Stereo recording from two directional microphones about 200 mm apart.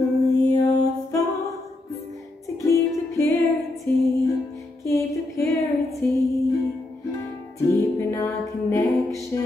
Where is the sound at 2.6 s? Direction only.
15° left (ahead or behind).